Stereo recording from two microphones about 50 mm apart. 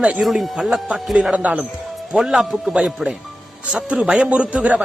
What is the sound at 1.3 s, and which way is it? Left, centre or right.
Speech, right.